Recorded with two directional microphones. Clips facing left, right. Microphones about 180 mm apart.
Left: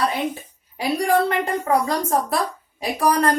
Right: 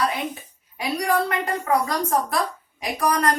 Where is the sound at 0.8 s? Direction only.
30° left (ahead or behind).